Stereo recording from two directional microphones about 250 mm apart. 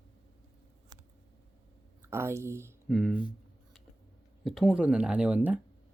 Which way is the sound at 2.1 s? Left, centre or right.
Centre.